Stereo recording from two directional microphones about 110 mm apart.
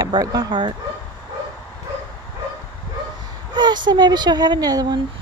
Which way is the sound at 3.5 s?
40° right (ahead or behind).